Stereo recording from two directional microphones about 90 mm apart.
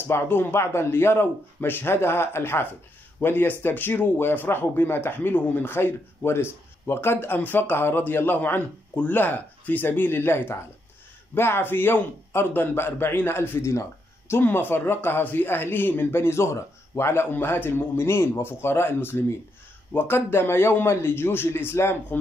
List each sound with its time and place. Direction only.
0.0 s a man's voice: 25° left (ahead or behind)